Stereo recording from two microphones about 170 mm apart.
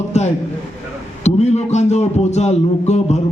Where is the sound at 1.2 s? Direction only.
40° left (ahead or behind).